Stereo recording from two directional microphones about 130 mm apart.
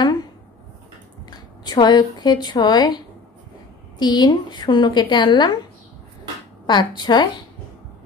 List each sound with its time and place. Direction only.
0.0 s dishes: 30° left (ahead or behind)
1.3 s speech: 30° left (ahead or behind)
4.0 s a woman's voice: 35° left (ahead or behind)
6.6 s a woman's voice: 35° left (ahead or behind)